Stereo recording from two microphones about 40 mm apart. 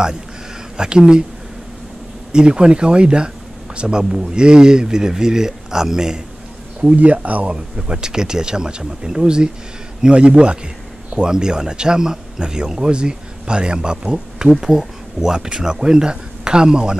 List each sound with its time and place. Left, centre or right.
0.7 s speech: right
2.3 s speech: right
7.0 s speech: right
7.5 s speech: right